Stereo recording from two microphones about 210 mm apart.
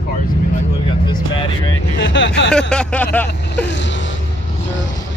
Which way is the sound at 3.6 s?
60° left (ahead or behind).